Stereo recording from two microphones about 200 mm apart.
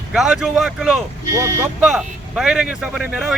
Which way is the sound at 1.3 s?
15° right (ahead or behind).